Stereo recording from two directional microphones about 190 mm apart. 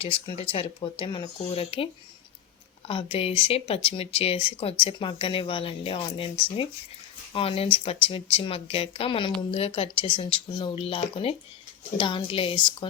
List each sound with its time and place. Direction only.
0.0 s speech: 30° left (ahead or behind)